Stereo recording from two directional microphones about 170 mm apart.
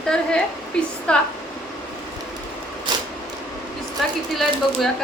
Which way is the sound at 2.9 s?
25° right (ahead or behind).